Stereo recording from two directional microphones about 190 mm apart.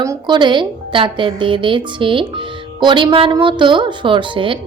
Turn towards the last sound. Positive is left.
turn(degrees=-25)  # may be behind; listen again after turning